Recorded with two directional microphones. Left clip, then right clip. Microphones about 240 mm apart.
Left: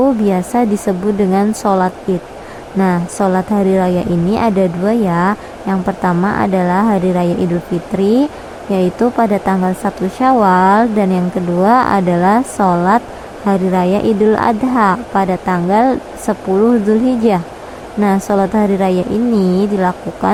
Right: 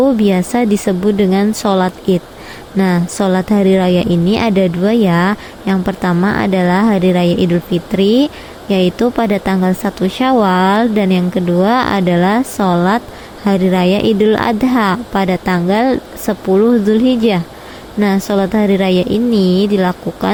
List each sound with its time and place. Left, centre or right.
0.0 s a woman's voice: right